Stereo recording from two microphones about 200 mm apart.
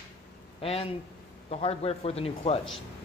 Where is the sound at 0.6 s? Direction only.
30° left (ahead or behind).